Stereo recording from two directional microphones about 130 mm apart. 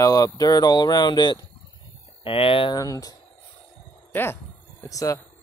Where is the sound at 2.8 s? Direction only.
25° left (ahead or behind).